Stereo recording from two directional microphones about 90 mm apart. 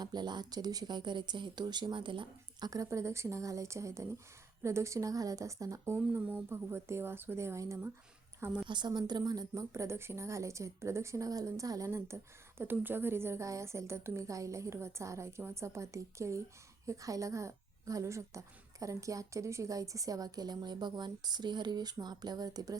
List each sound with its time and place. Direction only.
0.0 s speech: 50° right (ahead or behind)
2.6 s a woman's voice: 40° right (ahead or behind)
8.6 s a woman's voice: 55° right (ahead or behind)